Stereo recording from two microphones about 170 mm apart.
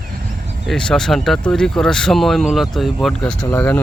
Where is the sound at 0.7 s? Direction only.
5° left (ahead or behind).